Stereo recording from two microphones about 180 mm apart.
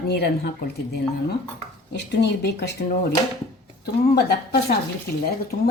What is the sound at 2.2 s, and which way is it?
Speech, 65° left (ahead or behind).